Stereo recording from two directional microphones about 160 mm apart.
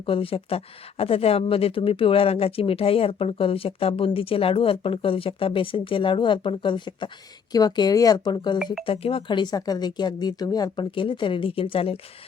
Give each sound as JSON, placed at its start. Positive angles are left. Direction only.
{"t": 0.0, "sound": "speech", "side_deg": 35}